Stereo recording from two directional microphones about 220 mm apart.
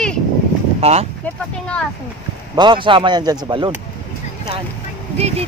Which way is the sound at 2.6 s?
20° right (ahead or behind).